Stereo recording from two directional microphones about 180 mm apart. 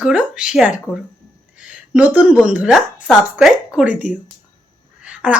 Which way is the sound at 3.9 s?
45° left (ahead or behind).